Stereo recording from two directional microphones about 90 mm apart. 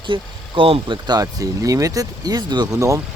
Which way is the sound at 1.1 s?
40° right (ahead or behind).